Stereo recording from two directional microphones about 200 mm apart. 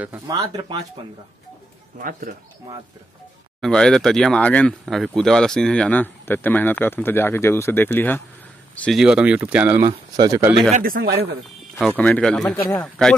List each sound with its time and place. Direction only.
0.0 s speech: 15° right (ahead or behind)
2.0 s speech: 45° right (ahead or behind)
3.6 s speech: 5° left (ahead or behind)
9.8 s speech: 20° right (ahead or behind)
10.7 s speech: 45° right (ahead or behind)
12.0 s speech: 5° left (ahead or behind)